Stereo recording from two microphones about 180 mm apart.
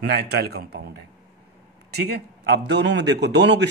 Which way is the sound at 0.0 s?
65° right (ahead or behind).